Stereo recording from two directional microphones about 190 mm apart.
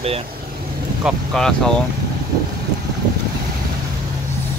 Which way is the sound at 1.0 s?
Centre (ahead or behind).